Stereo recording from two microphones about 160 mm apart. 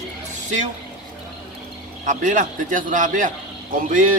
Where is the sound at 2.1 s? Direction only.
50° right (ahead or behind).